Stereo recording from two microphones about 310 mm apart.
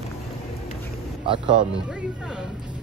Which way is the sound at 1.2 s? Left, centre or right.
Centre.